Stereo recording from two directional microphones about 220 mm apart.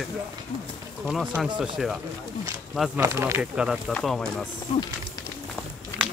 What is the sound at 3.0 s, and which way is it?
Speech, 10° right (ahead or behind).